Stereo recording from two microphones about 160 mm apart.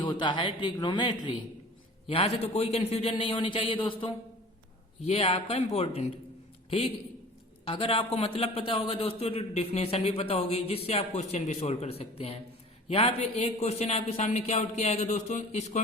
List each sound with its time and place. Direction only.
0.0 s a man's voice: 30° left (ahead or behind)
2.0 s a man's voice: 40° left (ahead or behind)